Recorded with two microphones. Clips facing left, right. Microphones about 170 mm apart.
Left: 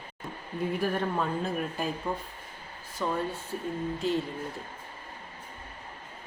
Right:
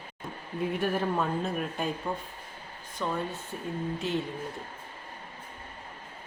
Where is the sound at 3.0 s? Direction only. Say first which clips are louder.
Left 1 dB; 10° left (ahead or behind).